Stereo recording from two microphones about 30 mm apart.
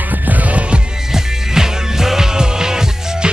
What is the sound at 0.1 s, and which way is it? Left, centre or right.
Music, right.